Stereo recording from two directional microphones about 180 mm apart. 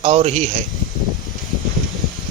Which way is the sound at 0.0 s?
35° right (ahead or behind).